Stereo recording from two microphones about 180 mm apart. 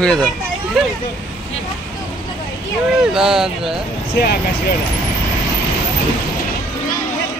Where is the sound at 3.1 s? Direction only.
Centre (ahead or behind).